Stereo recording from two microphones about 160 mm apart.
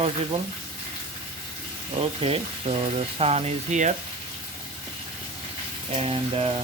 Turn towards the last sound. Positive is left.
turn(degrees=-35)  # may be behind; listen again after turning